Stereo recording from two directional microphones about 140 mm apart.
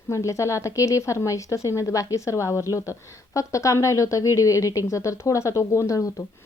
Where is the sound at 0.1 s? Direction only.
20° left (ahead or behind).